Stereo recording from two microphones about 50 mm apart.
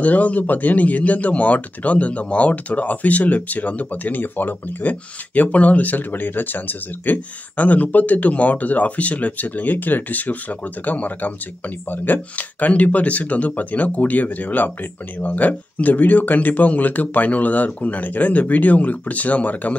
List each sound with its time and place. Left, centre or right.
0.0 s speech: left